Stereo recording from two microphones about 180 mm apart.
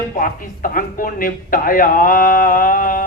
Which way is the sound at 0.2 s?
50° left (ahead or behind).